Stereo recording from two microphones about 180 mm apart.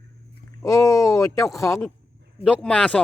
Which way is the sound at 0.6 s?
15° left (ahead or behind).